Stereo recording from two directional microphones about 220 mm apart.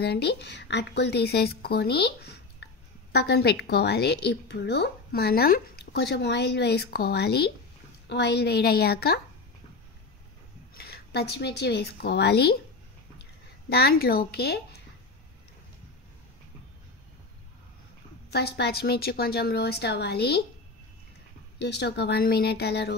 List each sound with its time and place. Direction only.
0.0 s speech: 50° left (ahead or behind)
10.7 s speech: 45° left (ahead or behind)
13.7 s speech: 45° left (ahead or behind)
18.3 s speech: 45° left (ahead or behind)
21.5 s speech: 50° left (ahead or behind)